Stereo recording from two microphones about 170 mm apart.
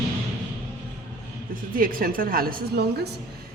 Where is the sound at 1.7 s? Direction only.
55° right (ahead or behind); by 3.1 s 70° right (ahead or behind).